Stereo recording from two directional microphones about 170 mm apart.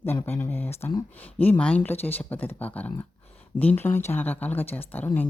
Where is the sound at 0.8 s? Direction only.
25° left (ahead or behind).